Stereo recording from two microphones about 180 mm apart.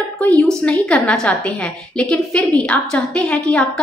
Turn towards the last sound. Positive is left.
turn(degrees=5)  # may be behind; listen again after turning